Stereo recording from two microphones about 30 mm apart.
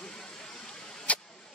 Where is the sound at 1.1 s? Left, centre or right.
Left.